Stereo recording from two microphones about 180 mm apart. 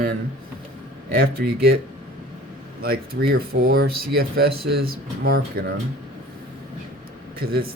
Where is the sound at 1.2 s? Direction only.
60° right (ahead or behind).